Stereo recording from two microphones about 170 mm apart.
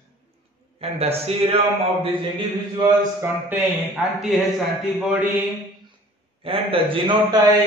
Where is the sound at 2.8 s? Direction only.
15° right (ahead or behind).